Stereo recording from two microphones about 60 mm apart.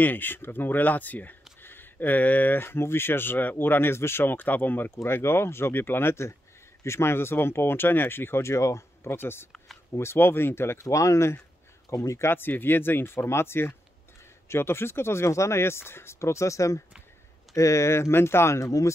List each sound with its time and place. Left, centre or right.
0.0 s speech: left
10.9 s speech: left